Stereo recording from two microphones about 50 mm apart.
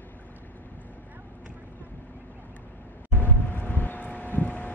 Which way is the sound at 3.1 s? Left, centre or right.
Left.